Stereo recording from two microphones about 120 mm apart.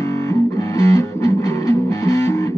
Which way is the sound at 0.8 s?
25° left (ahead or behind).